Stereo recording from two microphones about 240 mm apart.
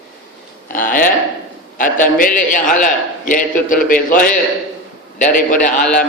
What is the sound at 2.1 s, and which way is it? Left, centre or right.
A man's voice, left.